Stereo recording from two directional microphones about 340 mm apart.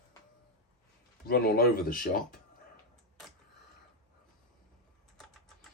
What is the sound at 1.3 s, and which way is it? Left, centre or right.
Speech, left.